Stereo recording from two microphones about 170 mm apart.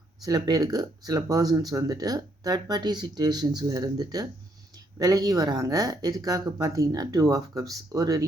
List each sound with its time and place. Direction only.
0.2 s speech: 20° right (ahead or behind)